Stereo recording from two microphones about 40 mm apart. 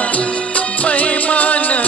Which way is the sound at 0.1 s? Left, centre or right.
Left.